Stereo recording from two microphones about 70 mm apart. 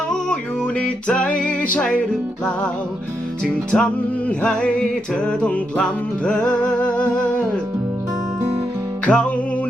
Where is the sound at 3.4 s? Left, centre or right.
Centre.